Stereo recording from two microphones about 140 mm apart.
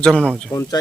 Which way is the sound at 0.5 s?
20° left (ahead or behind).